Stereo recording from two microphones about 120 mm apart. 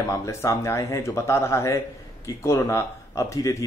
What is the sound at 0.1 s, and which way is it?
Speech, 25° left (ahead or behind).